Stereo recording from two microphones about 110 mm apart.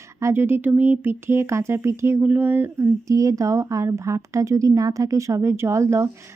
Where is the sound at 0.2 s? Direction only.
25° right (ahead or behind).